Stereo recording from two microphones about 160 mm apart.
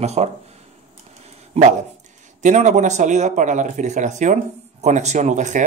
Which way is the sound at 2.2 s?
50° right (ahead or behind).